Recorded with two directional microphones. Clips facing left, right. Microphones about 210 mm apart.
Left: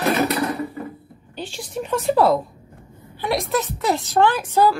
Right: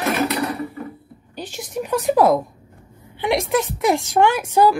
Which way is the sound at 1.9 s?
15° right (ahead or behind).